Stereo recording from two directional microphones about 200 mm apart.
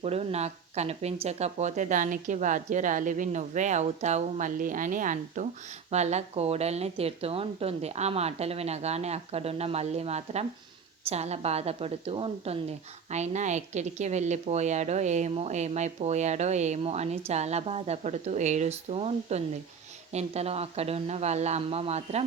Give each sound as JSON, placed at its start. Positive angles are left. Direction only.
{"t": 0.0, "sound": "a woman's voice", "side_deg": -30}